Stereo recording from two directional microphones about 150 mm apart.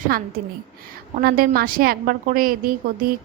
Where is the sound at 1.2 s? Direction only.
80° right.